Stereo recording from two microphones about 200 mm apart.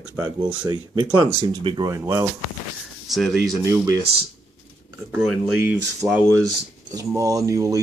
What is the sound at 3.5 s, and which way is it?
Speech, 15° right (ahead or behind).